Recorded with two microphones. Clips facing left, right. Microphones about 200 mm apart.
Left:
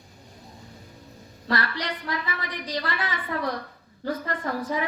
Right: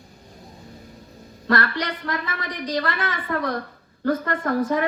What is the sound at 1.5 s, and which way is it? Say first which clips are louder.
Music: right 5 dB; 50° right (ahead or behind).